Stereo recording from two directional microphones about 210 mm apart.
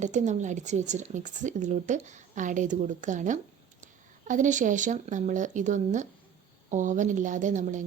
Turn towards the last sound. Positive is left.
turn(degrees=-35)  # may be behind; listen again after turning